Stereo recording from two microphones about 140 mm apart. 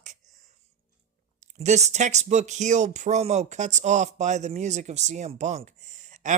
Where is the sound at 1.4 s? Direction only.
55° right (ahead or behind).